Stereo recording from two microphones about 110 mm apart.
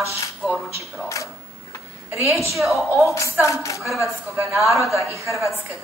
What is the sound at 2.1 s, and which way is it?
Speech, 25° right (ahead or behind).